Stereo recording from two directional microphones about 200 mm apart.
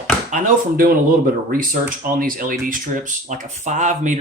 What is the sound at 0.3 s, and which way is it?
Speech, 40° right (ahead or behind).